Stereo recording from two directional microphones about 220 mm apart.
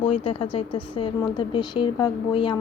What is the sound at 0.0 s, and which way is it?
Speech, 25° left (ahead or behind).